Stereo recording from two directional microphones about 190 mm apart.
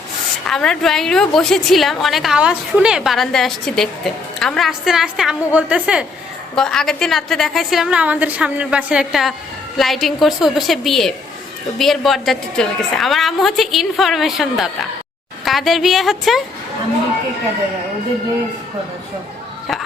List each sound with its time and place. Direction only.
0.4 s a woman's voice: 5° left (ahead or behind)